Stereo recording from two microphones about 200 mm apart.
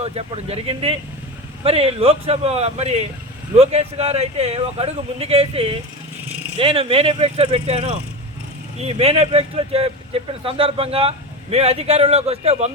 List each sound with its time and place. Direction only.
0.0 s speech: 30° right (ahead or behind)